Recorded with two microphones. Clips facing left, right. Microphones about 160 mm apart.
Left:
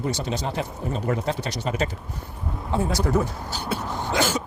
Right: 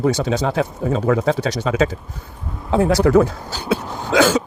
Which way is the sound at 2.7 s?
75° right (ahead or behind).